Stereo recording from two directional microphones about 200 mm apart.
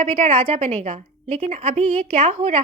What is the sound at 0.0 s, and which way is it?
A woman's voice, 30° right (ahead or behind).